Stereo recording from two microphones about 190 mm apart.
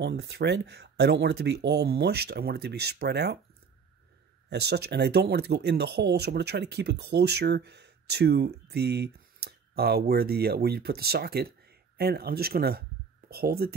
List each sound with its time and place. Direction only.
0.0 s speech: 60° right (ahead or behind)
4.5 s speech: 60° right (ahead or behind)